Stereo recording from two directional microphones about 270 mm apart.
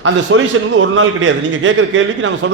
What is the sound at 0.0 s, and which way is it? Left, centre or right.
A man's voice, right.